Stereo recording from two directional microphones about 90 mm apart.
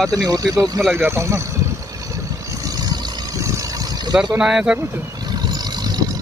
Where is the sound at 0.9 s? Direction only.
20° right (ahead or behind).